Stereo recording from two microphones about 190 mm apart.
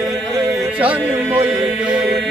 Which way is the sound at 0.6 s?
5° right (ahead or behind).